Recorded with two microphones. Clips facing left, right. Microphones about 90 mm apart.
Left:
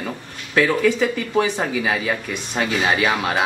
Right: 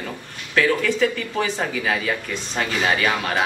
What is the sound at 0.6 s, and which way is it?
Speech, 15° left (ahead or behind).